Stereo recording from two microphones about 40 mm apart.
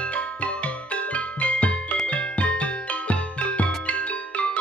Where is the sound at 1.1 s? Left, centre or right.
Left.